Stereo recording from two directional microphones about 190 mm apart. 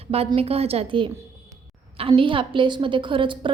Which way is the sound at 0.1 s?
30° right (ahead or behind).